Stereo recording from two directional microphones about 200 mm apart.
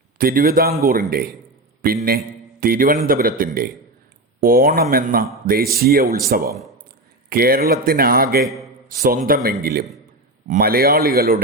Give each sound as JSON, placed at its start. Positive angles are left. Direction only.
{"t": 0.2, "sound": "a man's voice", "side_deg": -45}